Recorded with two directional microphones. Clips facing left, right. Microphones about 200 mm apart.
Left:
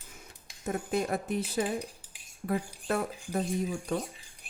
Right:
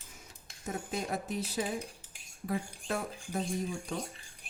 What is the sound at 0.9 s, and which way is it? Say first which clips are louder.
Speech: left 6 dB; 55° left (ahead or behind).